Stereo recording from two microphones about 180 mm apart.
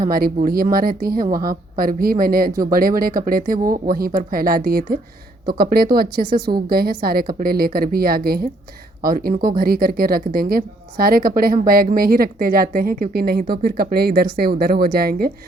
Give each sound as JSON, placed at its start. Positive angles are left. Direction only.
{"t": 0.0, "sound": "a woman's voice", "side_deg": -55}